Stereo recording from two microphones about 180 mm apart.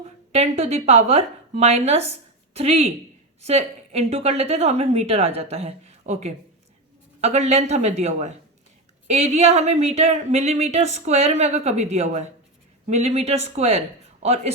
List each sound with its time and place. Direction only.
0.3 s a woman's voice: 35° right (ahead or behind)